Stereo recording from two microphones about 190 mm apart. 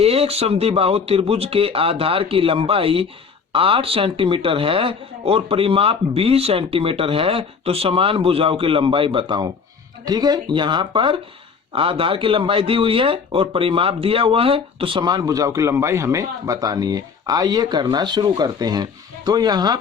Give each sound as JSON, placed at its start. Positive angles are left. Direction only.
{"t": 0.0, "sound": "speech", "side_deg": -30}